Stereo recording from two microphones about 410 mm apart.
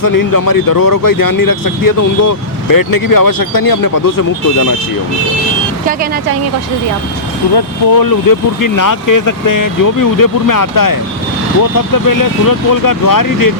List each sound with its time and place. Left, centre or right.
0.0 s speech: left
7.5 s speech: left
12.0 s speech: left